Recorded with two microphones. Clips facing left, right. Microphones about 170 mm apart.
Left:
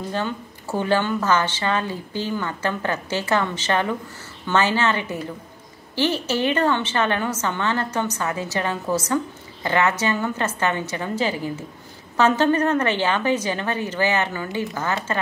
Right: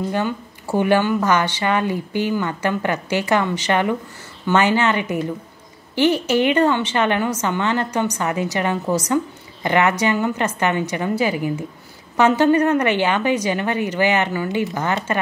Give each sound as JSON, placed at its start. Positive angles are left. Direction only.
{"t": 0.1, "sound": "a woman's voice", "side_deg": -15}